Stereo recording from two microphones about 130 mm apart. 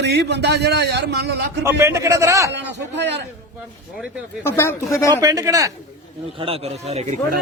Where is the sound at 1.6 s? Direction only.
20° right (ahead or behind).